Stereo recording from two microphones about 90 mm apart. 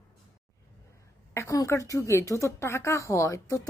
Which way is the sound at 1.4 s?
35° left (ahead or behind).